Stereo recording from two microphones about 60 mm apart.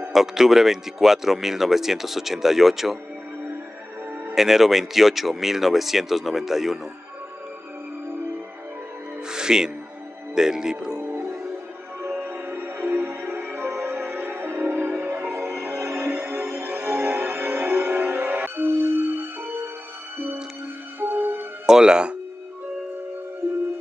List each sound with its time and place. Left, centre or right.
0.1 s speech: centre
4.4 s speech: centre
9.3 s music: centre
10.3 s speech: centre
12.0 s music: right
21.0 s music: right
21.6 s speech: centre